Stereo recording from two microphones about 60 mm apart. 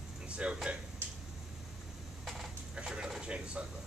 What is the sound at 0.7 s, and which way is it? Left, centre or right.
Speech, centre.